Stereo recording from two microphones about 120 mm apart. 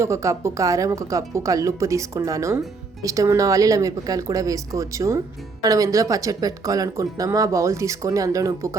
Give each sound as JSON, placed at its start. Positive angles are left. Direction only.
{"t": 0.0, "sound": "speech", "side_deg": -25}